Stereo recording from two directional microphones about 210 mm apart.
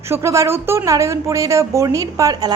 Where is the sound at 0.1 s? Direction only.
15° right (ahead or behind).